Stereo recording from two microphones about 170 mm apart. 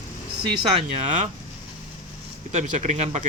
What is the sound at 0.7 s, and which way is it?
Speech, 45° right (ahead or behind).